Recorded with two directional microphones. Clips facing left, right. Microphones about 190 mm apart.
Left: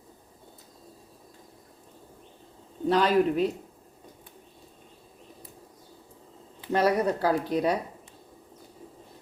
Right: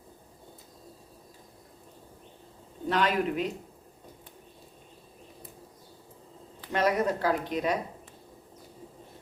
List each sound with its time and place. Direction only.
2.9 s speech: 35° left (ahead or behind)
6.7 s speech: 35° left (ahead or behind)